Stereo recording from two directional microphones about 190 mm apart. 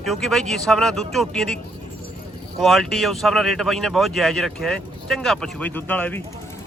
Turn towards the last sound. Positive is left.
turn(degrees=10)  # may be behind; listen again after turning